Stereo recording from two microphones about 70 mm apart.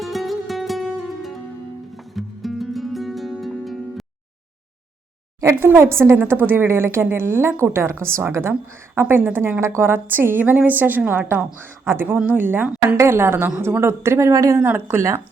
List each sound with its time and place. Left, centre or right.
0.0 s music: centre
5.5 s a woman's voice: right
14.6 s a woman's voice: right